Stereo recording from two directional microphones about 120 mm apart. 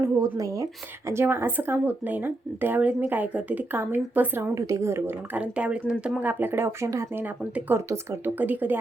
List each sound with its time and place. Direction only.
0.0 s speech: 30° right (ahead or behind)
4.5 s speech: 25° right (ahead or behind)